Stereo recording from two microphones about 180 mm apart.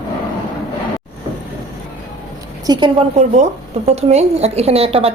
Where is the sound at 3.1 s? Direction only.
40° right (ahead or behind).